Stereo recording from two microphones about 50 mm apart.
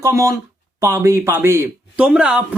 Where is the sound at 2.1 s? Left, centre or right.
Centre.